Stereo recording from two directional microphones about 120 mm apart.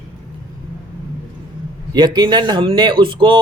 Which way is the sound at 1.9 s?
40° right (ahead or behind).